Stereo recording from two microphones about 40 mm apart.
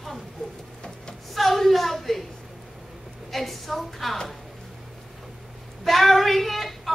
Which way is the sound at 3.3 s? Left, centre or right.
Centre.